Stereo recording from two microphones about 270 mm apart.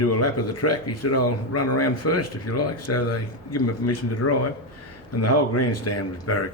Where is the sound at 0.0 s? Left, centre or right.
Left.